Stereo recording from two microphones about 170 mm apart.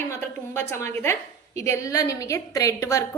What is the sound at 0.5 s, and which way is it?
A woman's voice, 15° left (ahead or behind).